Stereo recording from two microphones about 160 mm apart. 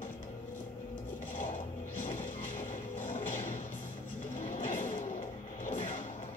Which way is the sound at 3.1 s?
50° left (ahead or behind).